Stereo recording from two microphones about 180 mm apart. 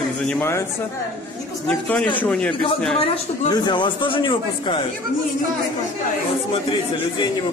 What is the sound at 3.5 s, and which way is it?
Speech, 25° left (ahead or behind).